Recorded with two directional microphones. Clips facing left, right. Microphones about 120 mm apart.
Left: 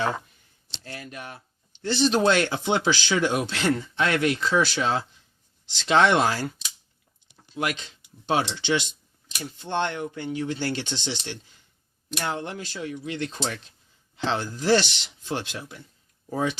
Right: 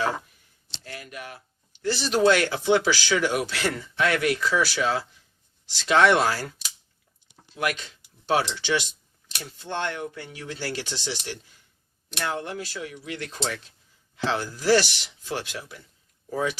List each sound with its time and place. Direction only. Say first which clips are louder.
0.9 s speech: even; 30° left (ahead or behind)
7.6 s speech: right 1 dB; 20° left (ahead or behind)
12.2 s speech: right 1 dB; 20° left (ahead or behind)